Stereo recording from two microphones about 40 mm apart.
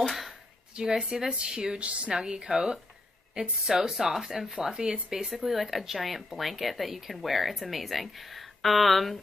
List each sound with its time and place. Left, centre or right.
0.3 s a sound: centre
1.3 s speech: right
1.8 s speech: right
2.1 s speech: centre